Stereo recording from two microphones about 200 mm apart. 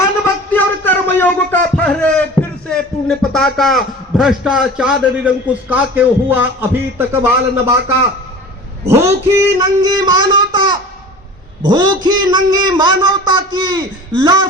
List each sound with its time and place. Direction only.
0.5 s a sound: 10° left (ahead or behind)
1.7 s speech: 5° left (ahead or behind); by 7.8 s 10° right (ahead or behind)
8.9 s a man's voice: 15° right (ahead or behind)